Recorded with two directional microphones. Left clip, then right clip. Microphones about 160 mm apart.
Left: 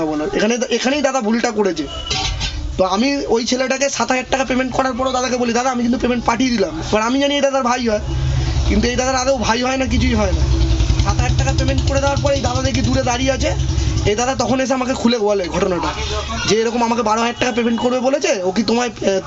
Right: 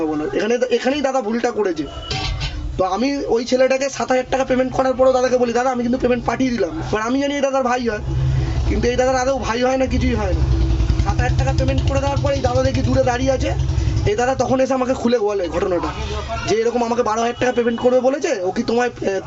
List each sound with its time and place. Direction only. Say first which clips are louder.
0.3 s a man's voice: right 1 dB; 15° left (ahead or behind)
2.7 s a man's voice: left 2 dB; 15° left (ahead or behind)
12.2 s a man's voice: even; 10° left (ahead or behind)